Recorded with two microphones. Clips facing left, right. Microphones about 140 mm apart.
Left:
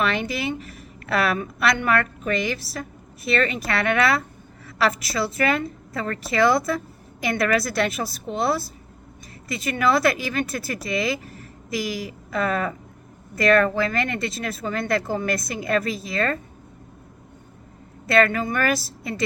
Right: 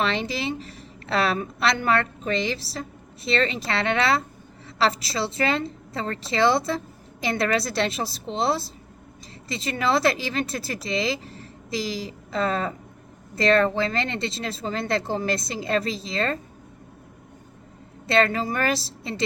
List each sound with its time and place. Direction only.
0.0 s a woman's voice: 25° right (ahead or behind)
18.0 s a woman's voice: 25° right (ahead or behind)